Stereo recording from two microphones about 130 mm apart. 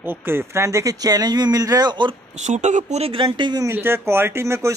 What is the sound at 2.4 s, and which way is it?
Speech, 70° right (ahead or behind).